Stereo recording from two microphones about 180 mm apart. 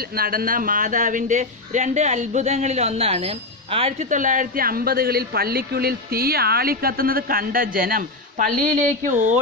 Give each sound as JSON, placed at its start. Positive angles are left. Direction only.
{"t": 0.1, "sound": "a man's voice", "side_deg": -55}